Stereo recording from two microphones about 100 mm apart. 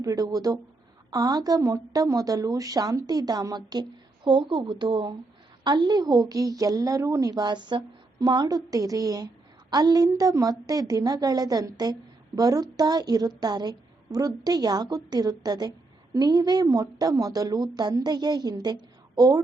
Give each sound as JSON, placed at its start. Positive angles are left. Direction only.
{"t": 0.0, "sound": "a woman's voice", "side_deg": -40}